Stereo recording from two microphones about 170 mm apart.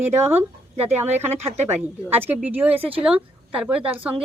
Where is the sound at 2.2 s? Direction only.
10° right (ahead or behind).